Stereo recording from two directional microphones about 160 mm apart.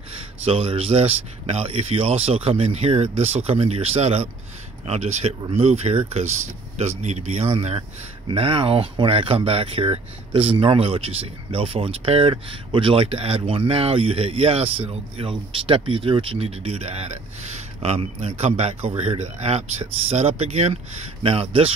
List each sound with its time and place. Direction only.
0.1 s speech: 35° right (ahead or behind)